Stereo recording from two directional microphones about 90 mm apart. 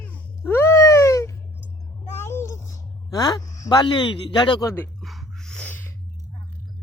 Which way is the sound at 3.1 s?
45° left (ahead or behind).